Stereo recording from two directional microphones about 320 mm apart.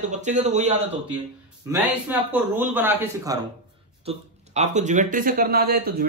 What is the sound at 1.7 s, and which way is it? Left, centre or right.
A man's voice, centre.